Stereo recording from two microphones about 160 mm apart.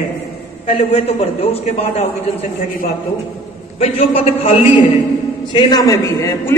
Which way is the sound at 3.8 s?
40° left (ahead or behind).